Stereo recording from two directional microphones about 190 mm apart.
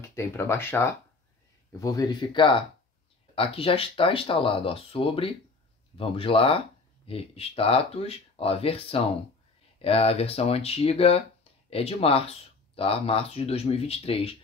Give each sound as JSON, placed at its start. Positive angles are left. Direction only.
{"t": 0.1, "sound": "speech", "side_deg": 15}